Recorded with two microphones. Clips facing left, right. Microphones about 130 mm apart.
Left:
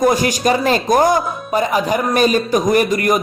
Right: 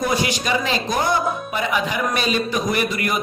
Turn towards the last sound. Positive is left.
turn(degrees=45)  # may be behind; listen again after turning